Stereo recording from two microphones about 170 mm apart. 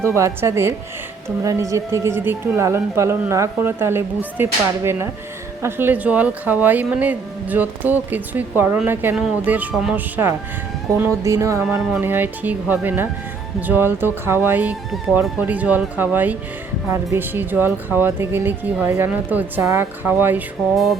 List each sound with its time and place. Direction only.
0.0 s speech: 15° right (ahead or behind)